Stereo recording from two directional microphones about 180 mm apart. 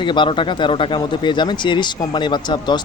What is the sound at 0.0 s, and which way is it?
Speech, 25° left (ahead or behind).